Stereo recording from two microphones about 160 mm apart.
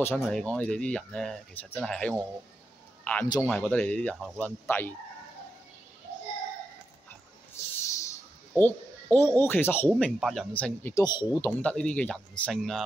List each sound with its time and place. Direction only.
0.0 s speech: 5° left (ahead or behind)
3.0 s a sound: 10° left (ahead or behind)
3.4 s speech: 5° left (ahead or behind)
7.6 s a sound: 15° left (ahead or behind)
8.5 s a man's voice: 15° left (ahead or behind)
11.1 s speech: 25° left (ahead or behind)
11.6 s speech: 5° left (ahead or behind)